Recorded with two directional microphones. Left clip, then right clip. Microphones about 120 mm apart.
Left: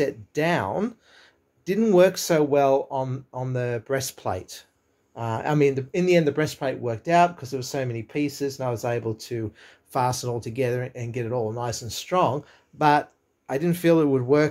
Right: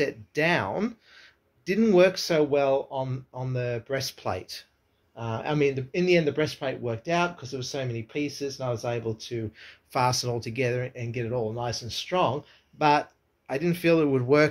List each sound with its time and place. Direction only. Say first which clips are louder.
0.0 s speech: left 1 dB; 25° left (ahead or behind); by 4.2 s 45° left (ahead or behind)
4.2 s a man's voice: left 2 dB; 30° left (ahead or behind)
5.1 s speech: left 4 dB; 40° left (ahead or behind)
7.8 s speech: left 3 dB; 45° left (ahead or behind)
9.5 s a man's voice: left 2 dB; 25° left (ahead or behind)